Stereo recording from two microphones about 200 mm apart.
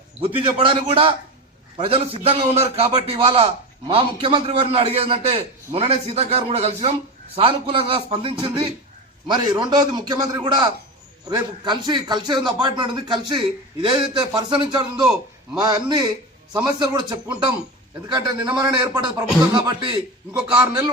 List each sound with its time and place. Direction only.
0.2 s a man's voice: 25° right (ahead or behind)
20.5 s a man's voice: 5° right (ahead or behind)